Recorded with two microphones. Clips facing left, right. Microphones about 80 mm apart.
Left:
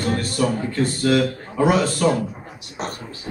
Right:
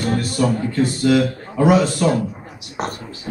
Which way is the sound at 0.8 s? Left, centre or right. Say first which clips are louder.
Right 2 dB; centre.